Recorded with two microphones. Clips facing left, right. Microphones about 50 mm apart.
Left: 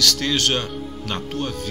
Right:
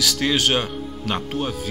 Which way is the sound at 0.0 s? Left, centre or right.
Centre.